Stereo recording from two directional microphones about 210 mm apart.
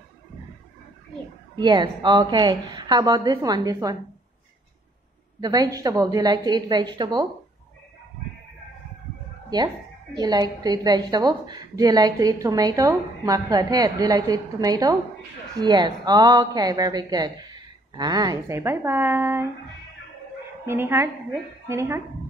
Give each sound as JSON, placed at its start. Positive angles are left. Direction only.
{"t": 1.6, "sound": "a woman's voice", "side_deg": -20}
{"t": 5.4, "sound": "a woman's voice", "side_deg": -20}
{"t": 9.5, "sound": "a woman's voice", "side_deg": -20}
{"t": 20.6, "sound": "a woman's voice", "side_deg": -10}